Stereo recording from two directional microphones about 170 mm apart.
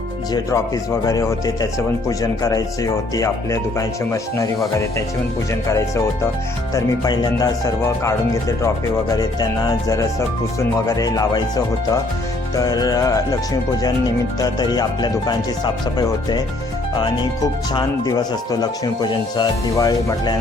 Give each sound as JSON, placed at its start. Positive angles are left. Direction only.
{"t": 0.3, "sound": "speech", "side_deg": 20}
{"t": 6.7, "sound": "speech", "side_deg": 25}